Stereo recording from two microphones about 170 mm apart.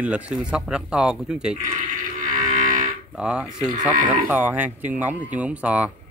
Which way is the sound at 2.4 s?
50° right (ahead or behind).